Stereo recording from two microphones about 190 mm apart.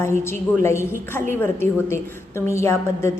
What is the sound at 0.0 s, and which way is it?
A woman's voice, 15° left (ahead or behind).